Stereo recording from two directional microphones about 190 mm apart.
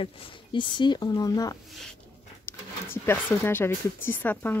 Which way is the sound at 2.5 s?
10° left (ahead or behind).